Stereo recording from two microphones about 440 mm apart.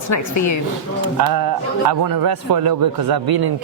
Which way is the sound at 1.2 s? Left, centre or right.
Right.